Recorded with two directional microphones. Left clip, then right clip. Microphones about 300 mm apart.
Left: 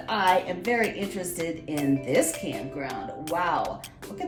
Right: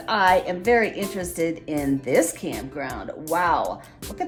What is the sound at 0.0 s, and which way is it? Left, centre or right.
Speech, centre.